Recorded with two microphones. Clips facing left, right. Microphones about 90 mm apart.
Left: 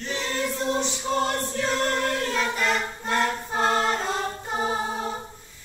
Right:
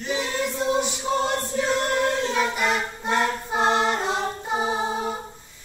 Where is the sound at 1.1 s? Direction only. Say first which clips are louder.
Even; 15° right (ahead or behind).